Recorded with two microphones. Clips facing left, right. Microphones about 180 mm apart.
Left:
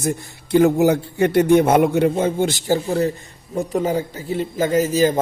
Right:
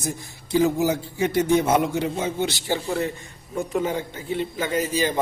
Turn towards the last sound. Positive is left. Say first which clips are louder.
# left 7 dB
turn(degrees=45)  # may be behind; listen again after turning